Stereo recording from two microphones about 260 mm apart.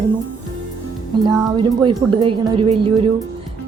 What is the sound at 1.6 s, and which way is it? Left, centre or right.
Speech, centre.